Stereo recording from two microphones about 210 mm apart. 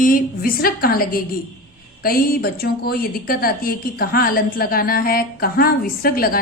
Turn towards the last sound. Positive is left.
turn(degrees=45)  # may be behind; listen again after turning